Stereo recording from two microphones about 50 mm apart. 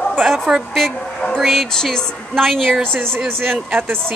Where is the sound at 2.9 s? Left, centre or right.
Right.